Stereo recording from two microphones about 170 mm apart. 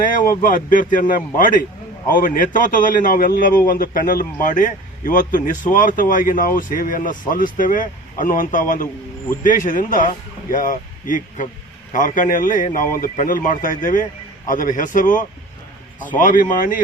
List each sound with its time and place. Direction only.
0.0 s a man's voice: 55° left (ahead or behind)